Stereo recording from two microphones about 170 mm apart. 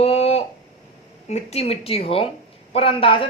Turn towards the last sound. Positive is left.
turn(degrees=30)  # may be behind; listen again after turning